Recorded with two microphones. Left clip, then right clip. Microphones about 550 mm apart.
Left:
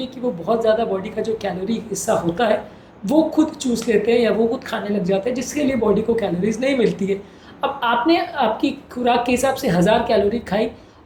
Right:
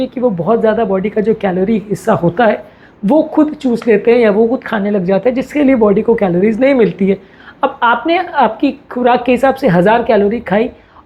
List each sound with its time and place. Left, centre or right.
0.0 s a woman's voice: right